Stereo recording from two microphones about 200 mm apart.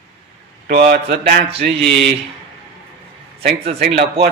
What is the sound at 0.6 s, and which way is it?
Speech, 50° right (ahead or behind).